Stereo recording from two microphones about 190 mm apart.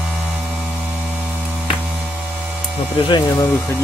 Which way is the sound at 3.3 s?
10° left (ahead or behind).